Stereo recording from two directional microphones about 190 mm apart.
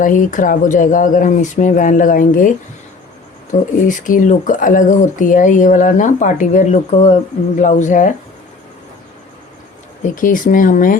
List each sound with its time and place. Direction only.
0.0 s speech: 45° left (ahead or behind)
3.5 s speech: 45° left (ahead or behind)
10.0 s speech: 45° left (ahead or behind)